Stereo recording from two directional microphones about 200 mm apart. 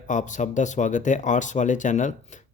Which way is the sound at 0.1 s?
40° left (ahead or behind).